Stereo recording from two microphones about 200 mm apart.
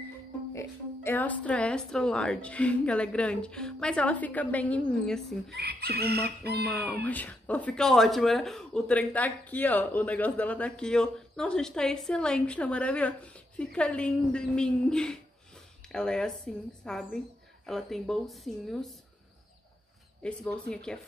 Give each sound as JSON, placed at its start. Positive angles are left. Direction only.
{"t": 0.5, "sound": "speech", "side_deg": 10}
{"t": 5.5, "sound": "speech", "side_deg": -55}
{"t": 6.7, "sound": "speech", "side_deg": 5}
{"t": 20.2, "sound": "speech", "side_deg": 5}